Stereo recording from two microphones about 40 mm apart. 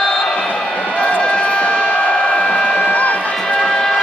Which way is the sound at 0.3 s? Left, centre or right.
Centre.